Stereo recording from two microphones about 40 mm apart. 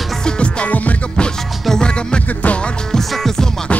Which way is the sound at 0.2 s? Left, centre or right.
Left.